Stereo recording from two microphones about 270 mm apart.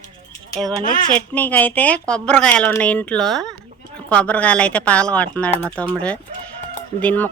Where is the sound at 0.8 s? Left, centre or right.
Left.